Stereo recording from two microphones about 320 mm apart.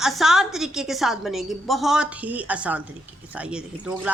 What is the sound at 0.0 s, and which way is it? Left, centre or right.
A woman's voice, centre.